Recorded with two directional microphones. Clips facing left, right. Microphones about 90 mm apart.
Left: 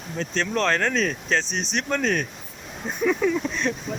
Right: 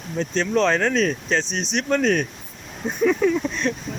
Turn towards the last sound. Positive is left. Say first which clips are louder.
# right 2 dB
turn(degrees=5)  # may be behind; listen again after turning